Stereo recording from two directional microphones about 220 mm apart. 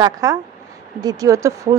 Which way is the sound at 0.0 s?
15° right (ahead or behind).